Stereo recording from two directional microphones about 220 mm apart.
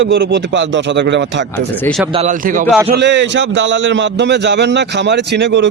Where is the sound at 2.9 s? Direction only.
55° right (ahead or behind).